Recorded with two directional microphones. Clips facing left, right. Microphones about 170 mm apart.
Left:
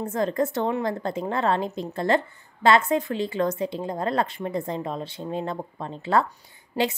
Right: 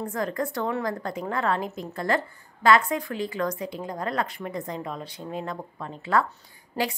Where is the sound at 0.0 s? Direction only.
25° left (ahead or behind).